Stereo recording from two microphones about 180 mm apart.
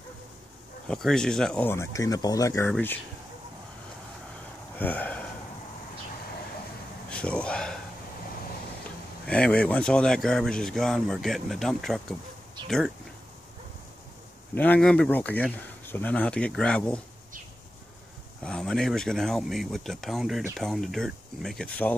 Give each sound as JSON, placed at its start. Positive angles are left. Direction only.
{"t": 0.8, "sound": "speech", "side_deg": 5}
{"t": 4.7, "sound": "speech", "side_deg": 10}
{"t": 7.1, "sound": "a sound", "side_deg": 5}
{"t": 9.2, "sound": "speech", "side_deg": 5}
{"t": 14.5, "sound": "speech", "side_deg": 10}
{"t": 18.4, "sound": "speech", "side_deg": 5}